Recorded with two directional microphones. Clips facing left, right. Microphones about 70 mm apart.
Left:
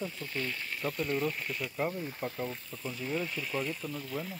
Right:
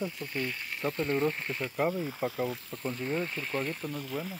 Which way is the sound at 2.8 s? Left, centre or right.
Right.